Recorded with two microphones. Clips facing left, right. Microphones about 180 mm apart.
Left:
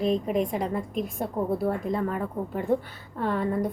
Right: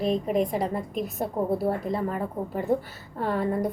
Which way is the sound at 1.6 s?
35° right (ahead or behind).